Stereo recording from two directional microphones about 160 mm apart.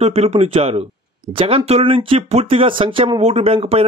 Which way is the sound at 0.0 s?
40° right (ahead or behind).